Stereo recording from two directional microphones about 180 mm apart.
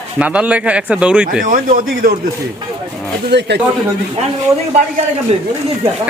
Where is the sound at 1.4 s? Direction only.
45° right (ahead or behind).